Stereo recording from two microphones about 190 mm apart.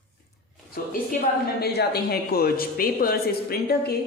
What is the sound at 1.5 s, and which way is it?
Speech, 60° left (ahead or behind).